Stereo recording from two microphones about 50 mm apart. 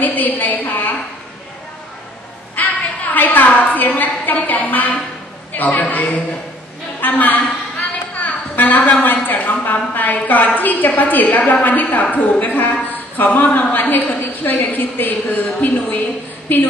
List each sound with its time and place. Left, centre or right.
0.0 s a woman's voice: left
2.6 s a sound: left
3.1 s a woman's voice: left